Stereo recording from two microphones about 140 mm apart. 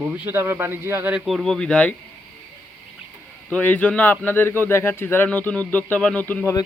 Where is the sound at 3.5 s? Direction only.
10° left (ahead or behind).